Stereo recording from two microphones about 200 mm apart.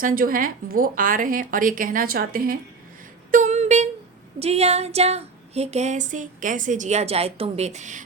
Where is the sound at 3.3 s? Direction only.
35° right (ahead or behind).